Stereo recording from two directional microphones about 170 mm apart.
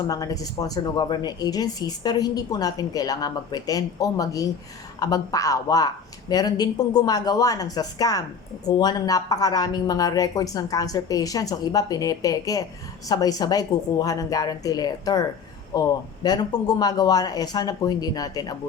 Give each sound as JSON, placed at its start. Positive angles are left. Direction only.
{"t": 0.1, "sound": "a woman's voice", "side_deg": 20}